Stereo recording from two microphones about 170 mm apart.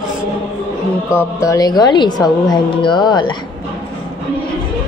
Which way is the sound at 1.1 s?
20° left (ahead or behind).